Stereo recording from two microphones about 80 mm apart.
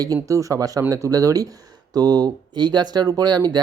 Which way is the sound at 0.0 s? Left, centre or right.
Right.